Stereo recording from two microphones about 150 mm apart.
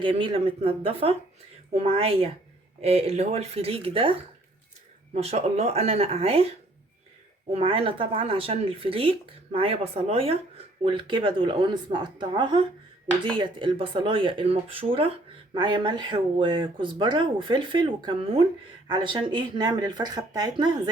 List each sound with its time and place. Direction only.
0.0 s speech: 35° right (ahead or behind)
7.5 s speech: 40° right (ahead or behind)